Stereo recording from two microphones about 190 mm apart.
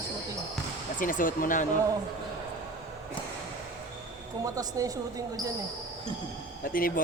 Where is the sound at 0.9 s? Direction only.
45° left (ahead or behind).